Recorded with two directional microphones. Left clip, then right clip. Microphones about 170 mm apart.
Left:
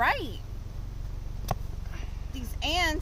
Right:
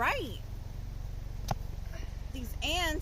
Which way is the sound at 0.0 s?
5° right (ahead or behind).